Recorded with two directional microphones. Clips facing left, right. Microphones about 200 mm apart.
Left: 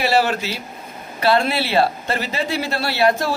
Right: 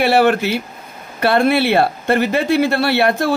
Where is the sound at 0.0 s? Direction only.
60° right (ahead or behind).